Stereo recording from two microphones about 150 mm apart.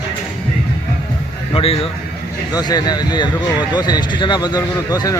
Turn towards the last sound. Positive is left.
turn(degrees=25)  # may be behind; listen again after turning